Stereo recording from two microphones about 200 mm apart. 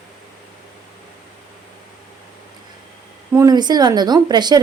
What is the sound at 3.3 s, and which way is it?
Speech, 20° right (ahead or behind).